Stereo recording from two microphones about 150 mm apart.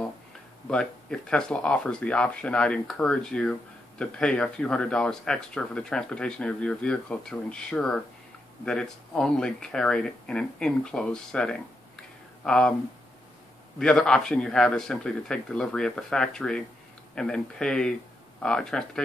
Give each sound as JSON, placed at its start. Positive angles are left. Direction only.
{"t": 0.7, "sound": "speech", "side_deg": 5}
{"t": 13.7, "sound": "speech", "side_deg": 5}